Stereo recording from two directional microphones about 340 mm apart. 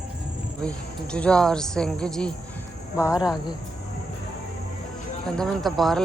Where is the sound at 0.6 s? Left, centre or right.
Centre.